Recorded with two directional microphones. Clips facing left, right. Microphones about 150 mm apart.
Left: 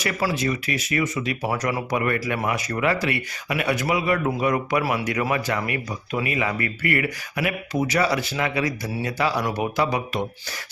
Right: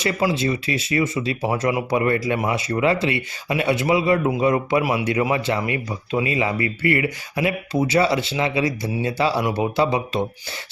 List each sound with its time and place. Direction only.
0.0 s speech: 20° right (ahead or behind)
4.8 s speech: 15° right (ahead or behind)